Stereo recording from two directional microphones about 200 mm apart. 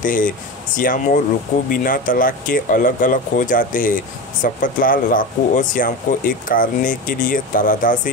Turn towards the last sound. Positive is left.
turn(degrees=45)  # may be behind; listen again after turning